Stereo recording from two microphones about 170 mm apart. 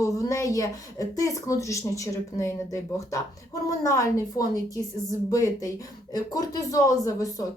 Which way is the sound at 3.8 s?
20° left (ahead or behind).